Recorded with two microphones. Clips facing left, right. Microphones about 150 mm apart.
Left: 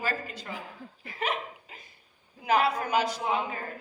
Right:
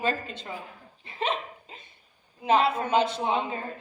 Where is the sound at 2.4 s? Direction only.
25° right (ahead or behind).